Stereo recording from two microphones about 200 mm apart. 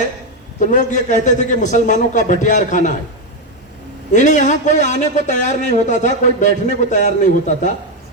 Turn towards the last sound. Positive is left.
turn(degrees=35)  # may be behind; listen again after turning